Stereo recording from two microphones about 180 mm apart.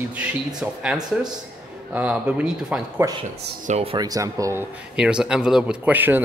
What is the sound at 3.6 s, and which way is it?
Speech, 35° right (ahead or behind).